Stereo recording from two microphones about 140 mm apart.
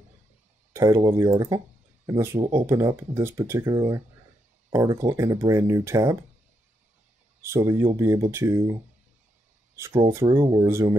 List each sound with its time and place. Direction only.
0.7 s speech: 20° right (ahead or behind)
7.4 s speech: 20° right (ahead or behind)
9.8 s speech: 20° right (ahead or behind)